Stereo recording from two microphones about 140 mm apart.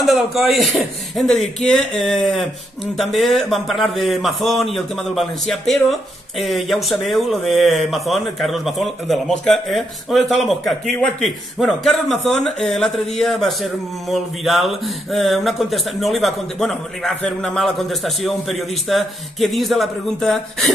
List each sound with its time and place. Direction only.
0.0 s speech: centre (ahead or behind)